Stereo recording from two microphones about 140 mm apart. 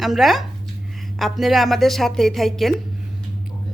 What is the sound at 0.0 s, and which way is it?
Speech, centre (ahead or behind).